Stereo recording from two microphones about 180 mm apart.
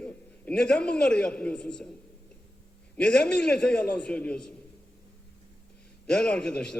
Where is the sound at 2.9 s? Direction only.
5° left (ahead or behind).